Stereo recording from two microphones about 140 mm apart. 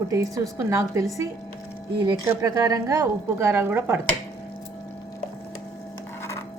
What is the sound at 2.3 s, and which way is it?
Speech, 20° right (ahead or behind).